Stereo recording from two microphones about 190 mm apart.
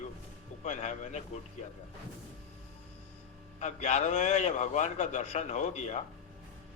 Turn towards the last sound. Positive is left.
turn(degrees=35)  # may be behind; listen again after turning